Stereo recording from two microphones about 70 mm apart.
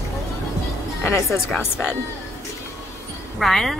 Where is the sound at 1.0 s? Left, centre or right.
Left.